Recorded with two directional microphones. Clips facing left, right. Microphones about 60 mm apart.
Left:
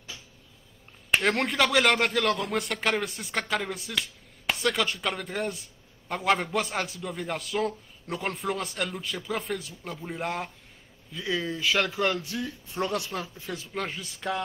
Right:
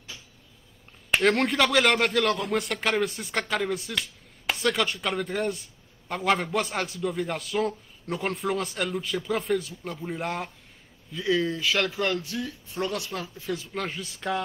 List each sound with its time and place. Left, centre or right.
1.1 s speech: centre
11.9 s speech: left
13.7 s speech: centre